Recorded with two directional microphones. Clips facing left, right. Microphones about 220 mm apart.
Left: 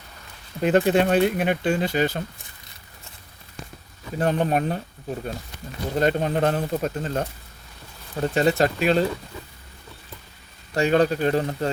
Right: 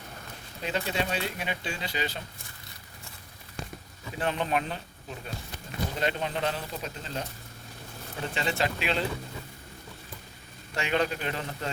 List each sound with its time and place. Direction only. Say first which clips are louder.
0.6 s speech: left 12 dB; 55° left (ahead or behind)
4.2 s speech: left 7 dB; 45° left (ahead or behind)
8.3 s speech: left 10 dB; 45° left (ahead or behind)
10.8 s a man's voice: left 9 dB; 40° left (ahead or behind)